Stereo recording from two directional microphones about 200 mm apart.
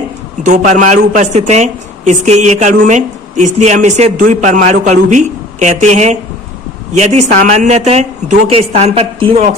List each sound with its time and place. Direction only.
0.4 s a man's voice: 40° right (ahead or behind)